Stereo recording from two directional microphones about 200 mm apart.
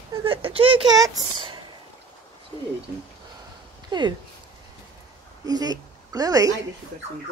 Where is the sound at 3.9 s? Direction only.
20° right (ahead or behind).